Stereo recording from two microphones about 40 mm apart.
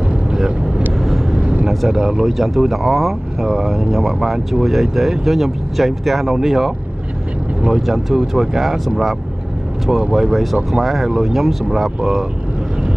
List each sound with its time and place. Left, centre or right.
0.3 s vehicle: centre
1.4 s vehicle: right
1.7 s speech: centre
2.2 s speech: centre
7.8 s speech: centre
9.8 s speech: centre
10.3 s speech: centre